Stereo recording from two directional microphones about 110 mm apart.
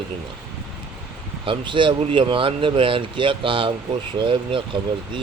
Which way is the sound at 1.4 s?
50° right (ahead or behind).